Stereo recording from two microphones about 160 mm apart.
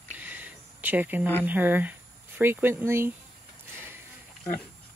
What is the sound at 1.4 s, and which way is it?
Speech, 10° right (ahead or behind).